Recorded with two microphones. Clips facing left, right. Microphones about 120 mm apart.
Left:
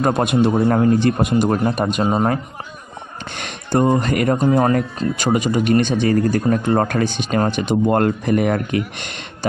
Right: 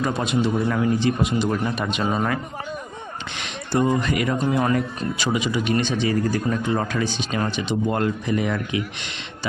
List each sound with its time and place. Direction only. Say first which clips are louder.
0.0 s speech: left 6 dB; 55° left (ahead or behind)